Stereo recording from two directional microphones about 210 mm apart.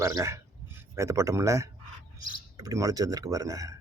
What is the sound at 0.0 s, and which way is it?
A man's voice, 15° right (ahead or behind).